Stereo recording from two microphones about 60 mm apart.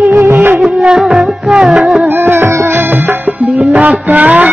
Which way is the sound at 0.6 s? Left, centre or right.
Centre.